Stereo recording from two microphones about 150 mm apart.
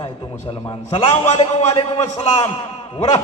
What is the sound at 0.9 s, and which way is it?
Speech, 45° left (ahead or behind).